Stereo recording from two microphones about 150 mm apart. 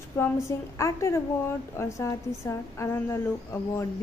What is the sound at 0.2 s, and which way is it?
A woman's voice, 20° left (ahead or behind).